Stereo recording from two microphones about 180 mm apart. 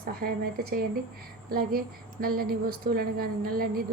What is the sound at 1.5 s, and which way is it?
A woman's voice, 55° right (ahead or behind).